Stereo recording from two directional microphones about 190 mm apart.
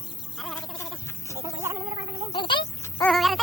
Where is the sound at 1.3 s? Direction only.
15° right (ahead or behind).